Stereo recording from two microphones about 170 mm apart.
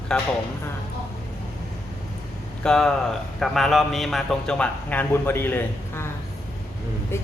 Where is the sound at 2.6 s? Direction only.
5° left (ahead or behind).